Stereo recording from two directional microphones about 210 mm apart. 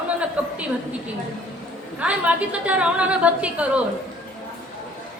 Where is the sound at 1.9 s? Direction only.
5° right (ahead or behind).